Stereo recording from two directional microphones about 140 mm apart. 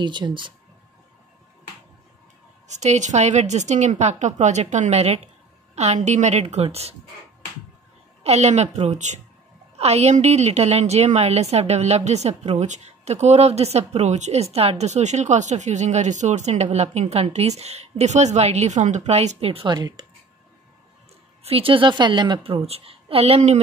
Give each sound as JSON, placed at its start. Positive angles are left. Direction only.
{"t": 0.0, "sound": "speech", "side_deg": -35}
{"t": 2.7, "sound": "a woman's voice", "side_deg": -55}
{"t": 8.2, "sound": "a woman's voice", "side_deg": -50}
{"t": 21.5, "sound": "a woman's voice", "side_deg": -40}